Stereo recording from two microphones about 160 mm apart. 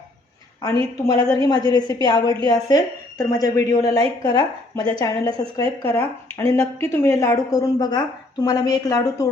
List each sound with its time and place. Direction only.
1.0 s a woman's voice: 20° left (ahead or behind)